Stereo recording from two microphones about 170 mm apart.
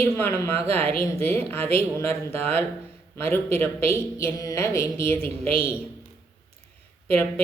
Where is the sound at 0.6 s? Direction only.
35° right (ahead or behind).